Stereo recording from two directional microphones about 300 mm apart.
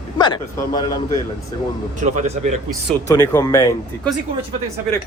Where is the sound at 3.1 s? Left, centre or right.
Centre.